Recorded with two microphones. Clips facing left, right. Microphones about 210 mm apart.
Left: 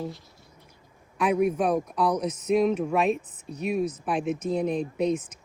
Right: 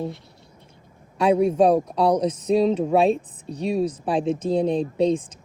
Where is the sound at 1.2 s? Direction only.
30° right (ahead or behind).